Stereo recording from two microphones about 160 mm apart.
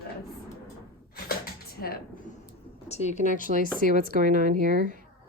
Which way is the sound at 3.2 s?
55° right (ahead or behind).